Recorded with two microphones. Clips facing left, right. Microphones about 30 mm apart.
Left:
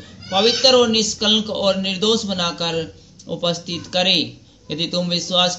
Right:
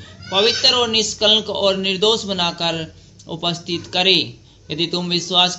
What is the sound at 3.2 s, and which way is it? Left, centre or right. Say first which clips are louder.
Speech: left 1 dB; centre.